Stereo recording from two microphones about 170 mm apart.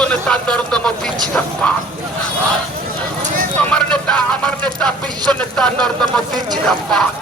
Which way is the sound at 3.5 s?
5° left (ahead or behind).